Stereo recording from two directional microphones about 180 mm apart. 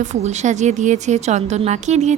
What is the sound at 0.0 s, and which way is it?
A woman's voice, 40° right (ahead or behind).